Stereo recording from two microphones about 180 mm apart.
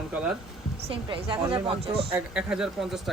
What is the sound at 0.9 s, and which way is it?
A woman's voice, 30° right (ahead or behind).